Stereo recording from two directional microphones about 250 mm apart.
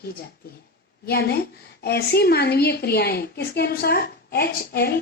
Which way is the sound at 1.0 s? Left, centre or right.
Left.